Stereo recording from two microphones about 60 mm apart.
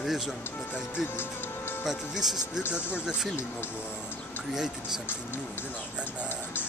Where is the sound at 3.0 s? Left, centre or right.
Centre.